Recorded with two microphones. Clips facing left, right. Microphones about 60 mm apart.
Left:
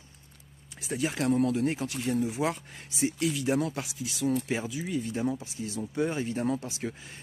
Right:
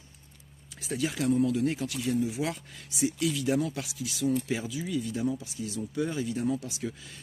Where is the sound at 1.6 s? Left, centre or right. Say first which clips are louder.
Even; left.